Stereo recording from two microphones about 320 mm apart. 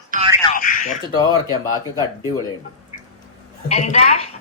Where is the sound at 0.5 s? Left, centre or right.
Left.